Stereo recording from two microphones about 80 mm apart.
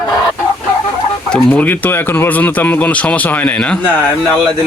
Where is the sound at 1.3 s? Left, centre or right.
Centre.